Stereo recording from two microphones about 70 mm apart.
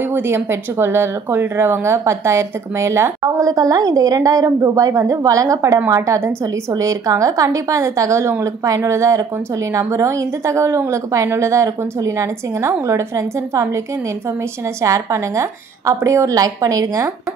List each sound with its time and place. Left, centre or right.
0.1 s speech: right
3.4 s a woman's voice: right
6.7 s a woman's voice: right
14.8 s a woman's voice: right